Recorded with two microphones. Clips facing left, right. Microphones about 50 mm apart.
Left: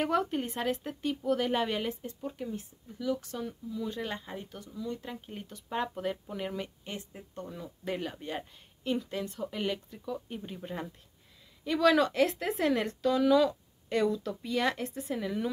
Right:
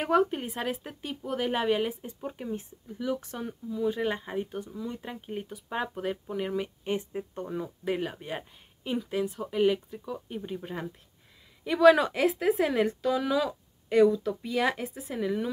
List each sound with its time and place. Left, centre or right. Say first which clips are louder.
0.0 s speech: right 4 dB; centre
2.1 s speech: right 2 dB; right
6.8 s speech: right 10 dB; right
7.8 s a woman's voice: right 2 dB; centre